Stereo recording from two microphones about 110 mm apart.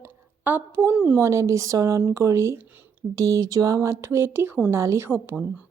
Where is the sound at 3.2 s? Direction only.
30° right (ahead or behind).